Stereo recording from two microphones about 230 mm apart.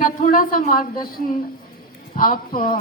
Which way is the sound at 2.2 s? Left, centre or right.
Left.